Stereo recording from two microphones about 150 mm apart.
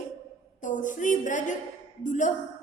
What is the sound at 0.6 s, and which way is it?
A woman's voice, 60° left (ahead or behind).